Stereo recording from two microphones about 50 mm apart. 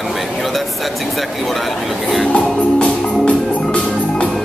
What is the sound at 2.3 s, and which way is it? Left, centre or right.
Music, left.